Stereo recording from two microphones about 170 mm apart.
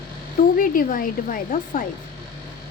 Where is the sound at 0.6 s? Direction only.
55° left (ahead or behind).